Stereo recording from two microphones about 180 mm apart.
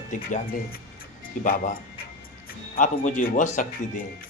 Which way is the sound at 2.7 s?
45° left (ahead or behind).